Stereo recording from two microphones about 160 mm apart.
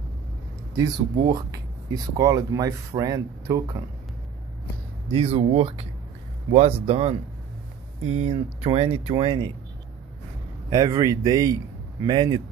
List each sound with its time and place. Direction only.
0.7 s speech: 25° right (ahead or behind)
5.1 s speech: 35° right (ahead or behind)
10.7 s speech: 20° right (ahead or behind)